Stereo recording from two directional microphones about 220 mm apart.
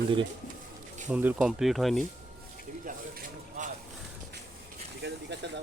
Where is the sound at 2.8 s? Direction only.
40° right (ahead or behind).